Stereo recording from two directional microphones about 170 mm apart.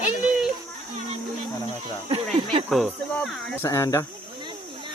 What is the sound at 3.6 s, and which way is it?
Speech, 15° left (ahead or behind).